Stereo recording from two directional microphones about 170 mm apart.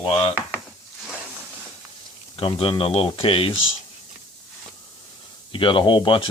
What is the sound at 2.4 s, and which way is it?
Speech, 35° left (ahead or behind).